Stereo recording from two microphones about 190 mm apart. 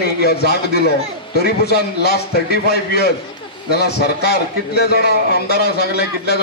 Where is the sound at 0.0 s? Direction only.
55° left (ahead or behind).